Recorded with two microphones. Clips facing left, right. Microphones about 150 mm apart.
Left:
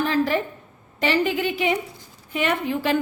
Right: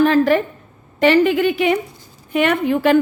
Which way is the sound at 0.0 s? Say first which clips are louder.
Right 8 dB; 60° right (ahead or behind).